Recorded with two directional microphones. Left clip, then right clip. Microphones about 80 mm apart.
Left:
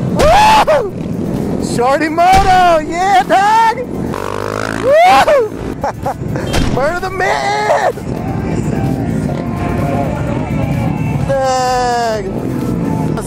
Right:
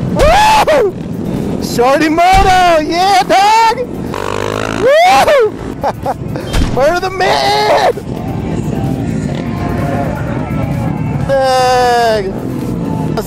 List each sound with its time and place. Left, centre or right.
0.3 s a sound: right
1.8 s speech: right
5.0 s speech: right
6.8 s speech: right
11.2 s speech: right